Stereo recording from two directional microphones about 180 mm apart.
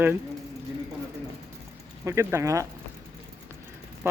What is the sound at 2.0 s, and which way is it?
Speech, 15° right (ahead or behind).